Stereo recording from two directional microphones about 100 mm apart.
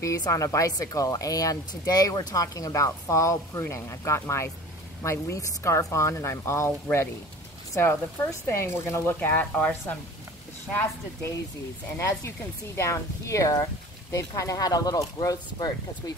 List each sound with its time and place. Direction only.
0.0 s speech: 35° left (ahead or behind); by 9.9 s 15° left (ahead or behind)
12.7 s speech: 30° left (ahead or behind)